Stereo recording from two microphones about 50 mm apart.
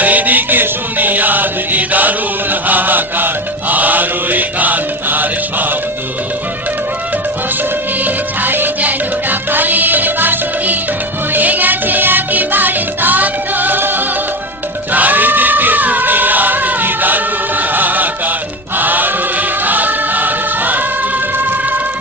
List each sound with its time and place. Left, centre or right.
0.0 s music: right
2.7 s mantra: right
3.7 s music: right
8.0 s music: right
14.9 s choir: right
18.8 s music: right